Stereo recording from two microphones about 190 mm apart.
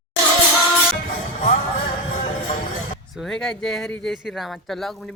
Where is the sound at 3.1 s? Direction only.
Centre (ahead or behind).